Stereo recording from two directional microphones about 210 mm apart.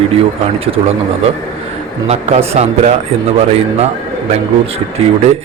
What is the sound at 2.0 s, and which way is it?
Speech, 30° right (ahead or behind).